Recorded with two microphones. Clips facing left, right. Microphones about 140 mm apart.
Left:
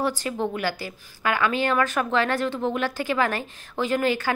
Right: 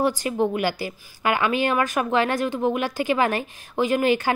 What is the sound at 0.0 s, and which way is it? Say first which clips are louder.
Speech: right 4 dB; 15° right (ahead or behind).